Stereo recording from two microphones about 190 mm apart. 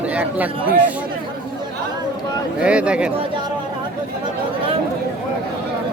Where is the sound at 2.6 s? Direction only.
5° right (ahead or behind).